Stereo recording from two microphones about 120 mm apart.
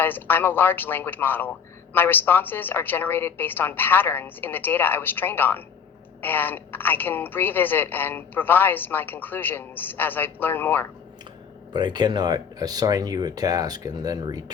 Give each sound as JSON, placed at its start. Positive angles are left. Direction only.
{"t": 0.0, "sound": "a woman's voice", "side_deg": 15}
{"t": 11.7, "sound": "speech", "side_deg": -40}